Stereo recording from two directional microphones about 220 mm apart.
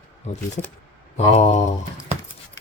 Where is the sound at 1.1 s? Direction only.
30° left (ahead or behind).